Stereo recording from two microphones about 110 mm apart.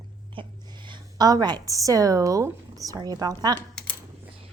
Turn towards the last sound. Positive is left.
turn(degrees=10)  # may be behind; listen again after turning